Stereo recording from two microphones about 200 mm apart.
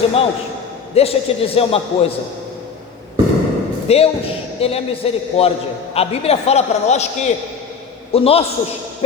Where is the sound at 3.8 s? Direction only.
30° left (ahead or behind).